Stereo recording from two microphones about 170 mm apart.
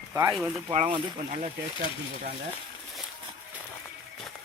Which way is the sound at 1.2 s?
40° right (ahead or behind).